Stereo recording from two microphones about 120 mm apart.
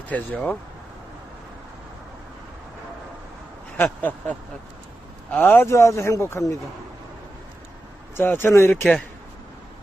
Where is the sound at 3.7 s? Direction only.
15° left (ahead or behind).